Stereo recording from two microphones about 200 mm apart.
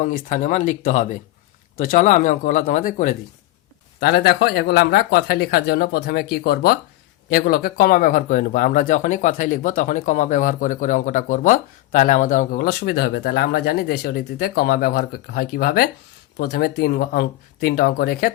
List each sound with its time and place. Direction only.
0.0 s speech: 35° left (ahead or behind)
4.0 s speech: 55° left (ahead or behind)